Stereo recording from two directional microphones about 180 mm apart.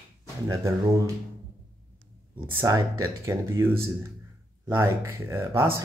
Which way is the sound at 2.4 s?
10° right (ahead or behind).